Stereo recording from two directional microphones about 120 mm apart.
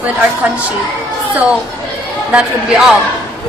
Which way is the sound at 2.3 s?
5° right (ahead or behind).